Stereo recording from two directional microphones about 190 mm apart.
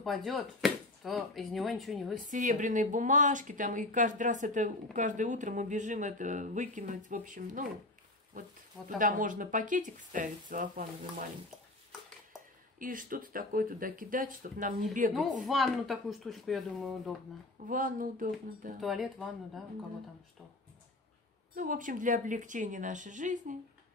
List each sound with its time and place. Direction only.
0.0 s speech: centre (ahead or behind)
2.1 s speech: 45° right (ahead or behind)
12.7 s speech: 45° right (ahead or behind)
15.4 s speech: centre (ahead or behind)
17.6 s speech: 45° right (ahead or behind)
18.8 s speech: centre (ahead or behind)
21.5 s speech: 45° right (ahead or behind)